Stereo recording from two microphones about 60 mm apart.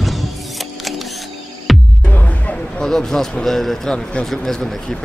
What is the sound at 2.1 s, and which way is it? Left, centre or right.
Music, left.